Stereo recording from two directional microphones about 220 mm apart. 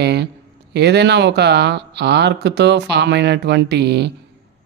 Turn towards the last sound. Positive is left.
turn(degrees=-50)  # may be behind; listen again after turning